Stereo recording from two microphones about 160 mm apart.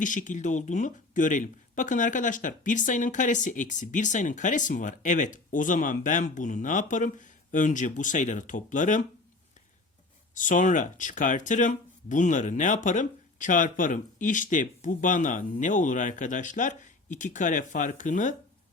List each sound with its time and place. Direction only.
0.0 s speech: 55° left (ahead or behind)
10.3 s speech: 55° left (ahead or behind)